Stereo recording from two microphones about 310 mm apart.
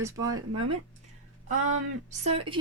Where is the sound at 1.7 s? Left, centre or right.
Right.